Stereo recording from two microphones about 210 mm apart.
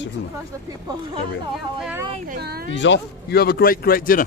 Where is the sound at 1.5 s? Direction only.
Centre (ahead or behind).